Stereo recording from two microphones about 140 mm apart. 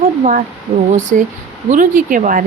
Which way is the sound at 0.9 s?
60° right (ahead or behind).